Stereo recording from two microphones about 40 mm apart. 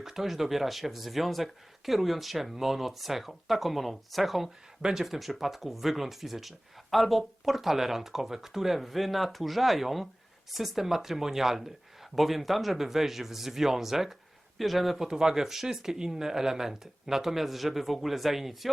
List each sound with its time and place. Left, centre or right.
0.0 s speech: centre
4.8 s speech: centre
5.0 s speech: centre
15.0 s speech: centre